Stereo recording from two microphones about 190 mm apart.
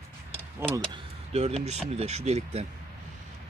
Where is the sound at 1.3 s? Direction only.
35° right (ahead or behind).